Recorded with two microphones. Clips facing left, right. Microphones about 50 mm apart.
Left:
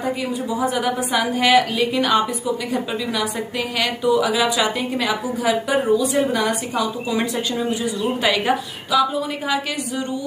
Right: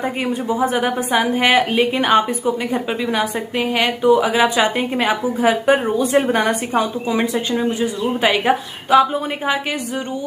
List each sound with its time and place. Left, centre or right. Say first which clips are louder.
0.0 s a woman's voice: right 2 dB; right
7.8 s a man's voice: right 3 dB; right
8.9 s a woman's voice: right 5 dB; right